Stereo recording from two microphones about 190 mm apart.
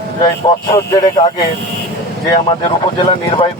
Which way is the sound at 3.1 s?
25° left (ahead or behind).